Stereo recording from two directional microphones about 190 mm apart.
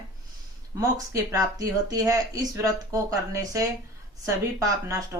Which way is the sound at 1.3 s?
20° right (ahead or behind).